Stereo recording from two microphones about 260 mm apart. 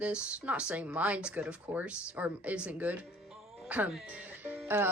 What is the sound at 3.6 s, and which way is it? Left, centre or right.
Music, centre.